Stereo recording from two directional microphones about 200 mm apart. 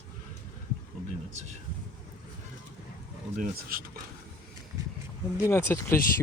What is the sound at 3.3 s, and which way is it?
Speech, 45° right (ahead or behind).